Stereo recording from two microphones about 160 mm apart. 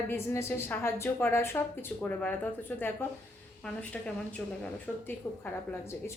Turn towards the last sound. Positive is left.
turn(degrees=15)  # may be behind; listen again after turning